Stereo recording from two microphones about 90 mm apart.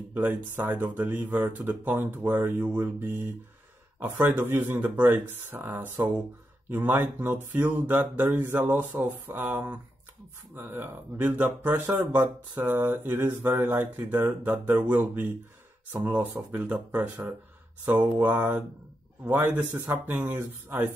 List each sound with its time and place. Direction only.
0.1 s speech: 20° right (ahead or behind)
18.2 s speech: 25° right (ahead or behind)